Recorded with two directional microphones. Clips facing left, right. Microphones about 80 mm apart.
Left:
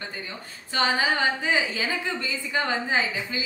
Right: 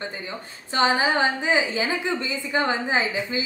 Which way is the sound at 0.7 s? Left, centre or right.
Right.